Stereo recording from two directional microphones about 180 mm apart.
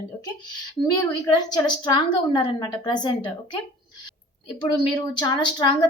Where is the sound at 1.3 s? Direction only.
20° left (ahead or behind).